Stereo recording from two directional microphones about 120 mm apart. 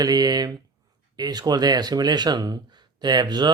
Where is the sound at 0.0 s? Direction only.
35° right (ahead or behind).